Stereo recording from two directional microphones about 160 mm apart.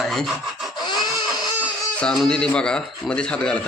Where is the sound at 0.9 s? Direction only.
25° left (ahead or behind).